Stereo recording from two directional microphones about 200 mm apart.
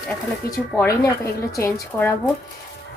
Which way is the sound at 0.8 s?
15° left (ahead or behind).